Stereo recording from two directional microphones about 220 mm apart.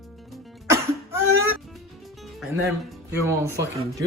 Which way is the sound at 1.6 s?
Centre (ahead or behind).